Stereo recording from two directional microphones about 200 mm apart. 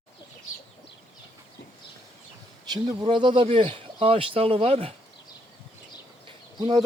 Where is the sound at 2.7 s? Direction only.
20° right (ahead or behind).